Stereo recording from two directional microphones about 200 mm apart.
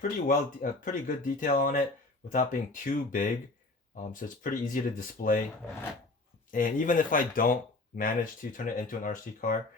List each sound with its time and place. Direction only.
0.0 s speech: 40° left (ahead or behind)
6.5 s speech: 40° left (ahead or behind)